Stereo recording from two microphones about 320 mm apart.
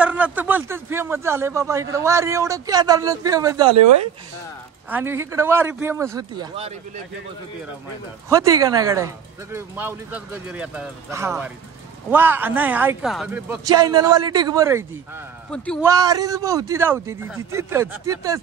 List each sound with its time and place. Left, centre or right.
0.0 s speech: centre
3.7 s speech: right
4.8 s speech: centre
8.3 s speech: centre
15.5 s a man's voice: centre
15.8 s speech: centre